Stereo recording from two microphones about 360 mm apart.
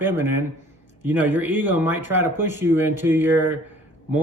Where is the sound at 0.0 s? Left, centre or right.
Centre.